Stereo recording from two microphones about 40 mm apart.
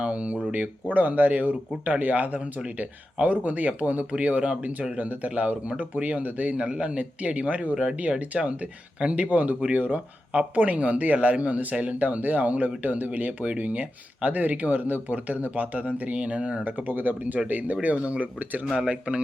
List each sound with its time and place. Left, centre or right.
0.0 s speech: right
0.9 s speech: right
6.6 s speech: right
16.6 s speech: right
17.8 s speech: right